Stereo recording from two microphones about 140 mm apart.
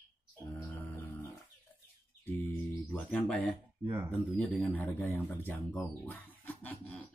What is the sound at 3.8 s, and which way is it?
Speech, 15° right (ahead or behind).